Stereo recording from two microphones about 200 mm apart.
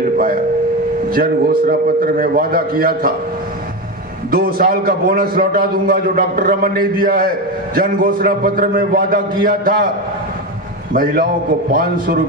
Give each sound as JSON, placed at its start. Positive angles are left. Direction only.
{"t": 1.1, "sound": "a man's voice", "side_deg": -45}
{"t": 4.3, "sound": "a man's voice", "side_deg": -50}
{"t": 10.9, "sound": "a man's voice", "side_deg": -45}